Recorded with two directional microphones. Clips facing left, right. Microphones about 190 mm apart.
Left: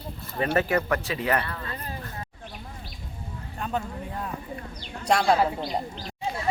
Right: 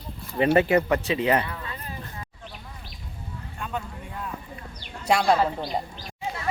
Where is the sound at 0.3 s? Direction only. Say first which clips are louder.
Right 5 dB; 20° right (ahead or behind).